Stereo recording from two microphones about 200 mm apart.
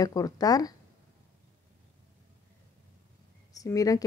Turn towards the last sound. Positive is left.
turn(degrees=15)  # may be behind; listen again after turning